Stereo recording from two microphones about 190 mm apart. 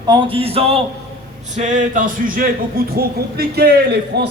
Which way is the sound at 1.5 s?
40° right (ahead or behind).